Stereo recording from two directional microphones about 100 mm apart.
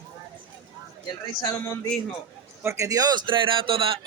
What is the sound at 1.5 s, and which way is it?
Speech, 25° left (ahead or behind).